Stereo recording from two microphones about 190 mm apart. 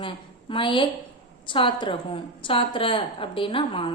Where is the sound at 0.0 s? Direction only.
25° left (ahead or behind).